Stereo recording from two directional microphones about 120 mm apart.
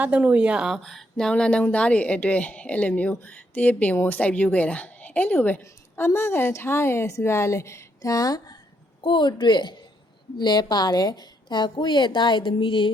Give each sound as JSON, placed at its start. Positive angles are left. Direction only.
{"t": 0.0, "sound": "speech", "side_deg": -15}
{"t": 0.8, "sound": "a woman's voice", "side_deg": 5}
{"t": 9.0, "sound": "a woman's voice", "side_deg": 45}